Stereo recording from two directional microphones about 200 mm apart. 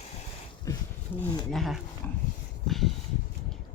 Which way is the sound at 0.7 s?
15° left (ahead or behind).